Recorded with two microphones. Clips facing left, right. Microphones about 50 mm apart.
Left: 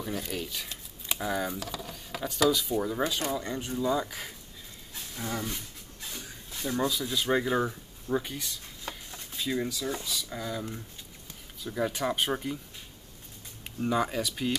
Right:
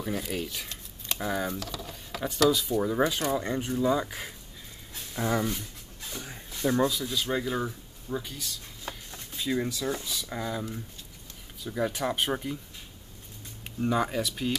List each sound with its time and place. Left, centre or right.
0.0 s speech: centre
0.7 s shuffling cards: centre
1.2 s speech: centre
1.5 s speech: centre
2.1 s a sound: centre
2.8 s speech: centre
5.1 s speech: right
5.5 s a sound: centre
6.6 s speech: centre
8.8 s speech: centre
11.6 s speech: centre
13.7 s speech: centre